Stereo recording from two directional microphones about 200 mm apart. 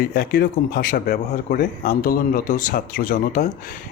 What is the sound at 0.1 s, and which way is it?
Speech, 50° left (ahead or behind).